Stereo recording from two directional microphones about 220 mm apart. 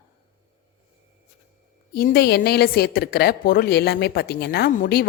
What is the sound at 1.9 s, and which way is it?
A woman's voice, 45° left (ahead or behind).